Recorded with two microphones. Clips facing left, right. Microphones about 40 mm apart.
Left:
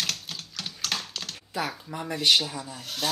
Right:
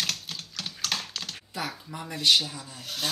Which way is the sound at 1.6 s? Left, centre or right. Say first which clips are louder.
Left 1 dB; centre.